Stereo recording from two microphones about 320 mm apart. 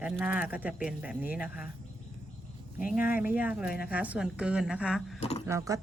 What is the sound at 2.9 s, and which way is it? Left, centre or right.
A woman's voice, centre.